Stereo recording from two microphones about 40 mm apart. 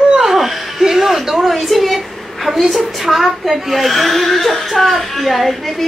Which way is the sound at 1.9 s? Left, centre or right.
Centre.